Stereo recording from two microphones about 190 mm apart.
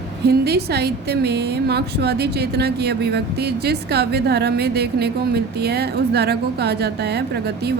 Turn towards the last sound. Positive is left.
turn(degrees=-60)  # may be behind; listen again after turning